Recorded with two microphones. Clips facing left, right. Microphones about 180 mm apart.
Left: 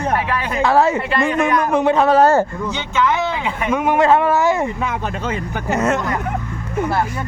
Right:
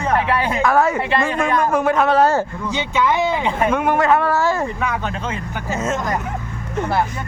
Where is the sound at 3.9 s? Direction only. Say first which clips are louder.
Left 2 dB; 25° left (ahead or behind).